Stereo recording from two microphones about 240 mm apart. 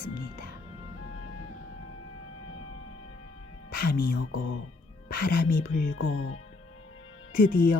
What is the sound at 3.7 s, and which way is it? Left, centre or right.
Speech, left.